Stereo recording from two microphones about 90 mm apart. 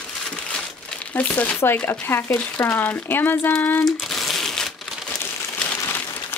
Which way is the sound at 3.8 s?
Centre (ahead or behind).